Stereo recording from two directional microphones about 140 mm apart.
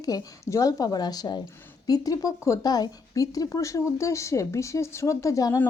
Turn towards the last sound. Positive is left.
turn(degrees=25)  # may be behind; listen again after turning